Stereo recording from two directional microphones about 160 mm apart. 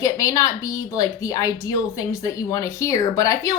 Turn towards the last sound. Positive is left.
turn(degrees=20)  # may be behind; listen again after turning